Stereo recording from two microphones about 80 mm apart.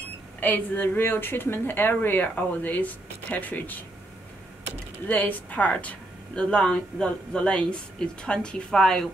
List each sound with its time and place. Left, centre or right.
0.4 s a woman's voice: left
5.0 s a woman's voice: left